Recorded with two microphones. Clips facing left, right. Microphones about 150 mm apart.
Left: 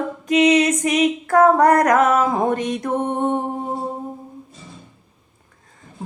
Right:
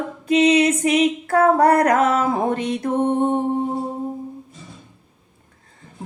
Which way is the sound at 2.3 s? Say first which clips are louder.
Left 1 dB; 45° left (ahead or behind).